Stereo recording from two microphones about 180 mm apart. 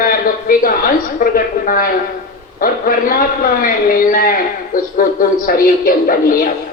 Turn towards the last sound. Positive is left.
turn(degrees=55)  # may be behind; listen again after turning